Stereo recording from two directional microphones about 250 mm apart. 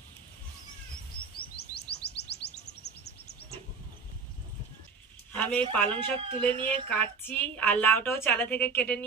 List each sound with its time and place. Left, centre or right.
1.3 s chirp: left
5.3 s a sound: centre
5.7 s a woman's voice: centre